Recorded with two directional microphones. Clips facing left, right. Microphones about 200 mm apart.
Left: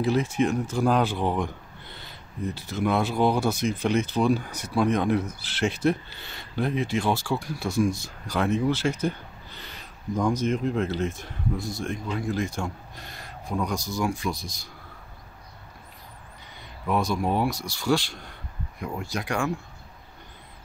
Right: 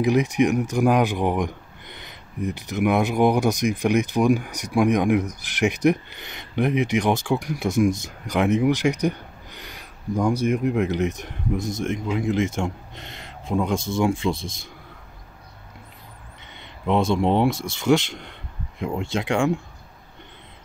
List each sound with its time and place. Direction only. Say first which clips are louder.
0.0 s a man's voice: right 4 dB; 15° right (ahead or behind)
16.5 s speech: right 5 dB; 25° right (ahead or behind)